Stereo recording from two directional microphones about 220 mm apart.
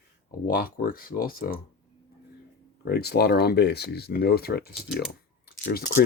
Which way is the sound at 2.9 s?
45° left (ahead or behind).